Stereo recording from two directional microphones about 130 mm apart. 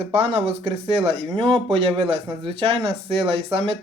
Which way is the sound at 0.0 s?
45° right (ahead or behind).